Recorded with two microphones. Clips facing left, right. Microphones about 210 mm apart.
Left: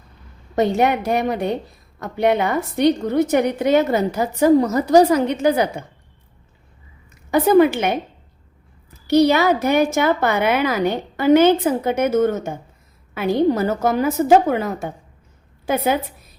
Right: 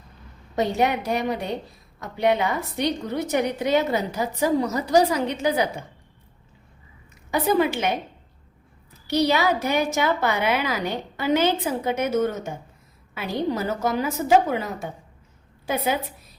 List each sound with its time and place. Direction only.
0.5 s a woman's voice: 55° left (ahead or behind)
7.3 s a woman's voice: 55° left (ahead or behind)
9.0 s a woman's voice: 50° left (ahead or behind)